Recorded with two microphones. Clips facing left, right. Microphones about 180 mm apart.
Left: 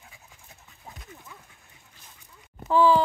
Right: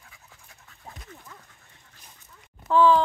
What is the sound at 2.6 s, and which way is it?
Speech, 10° left (ahead or behind).